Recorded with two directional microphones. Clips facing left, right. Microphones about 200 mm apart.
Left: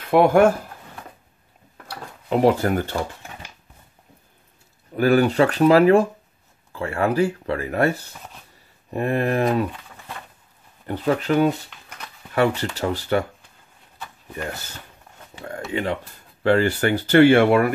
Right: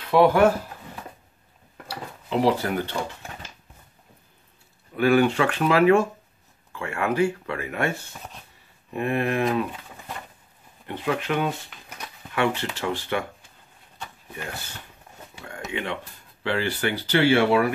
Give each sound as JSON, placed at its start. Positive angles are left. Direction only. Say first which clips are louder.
{"t": 0.0, "sound": "speech", "louder": "left 2 dB", "side_deg": 50}
{"t": 2.2, "sound": "speech", "louder": "left 4 dB", "side_deg": 45}
{"t": 4.9, "sound": "speech", "louder": "left 2 dB", "side_deg": 40}
{"t": 10.9, "sound": "speech", "louder": "left 5 dB", "side_deg": 40}
{"t": 15.7, "sound": "speech", "louder": "left 5 dB", "side_deg": 40}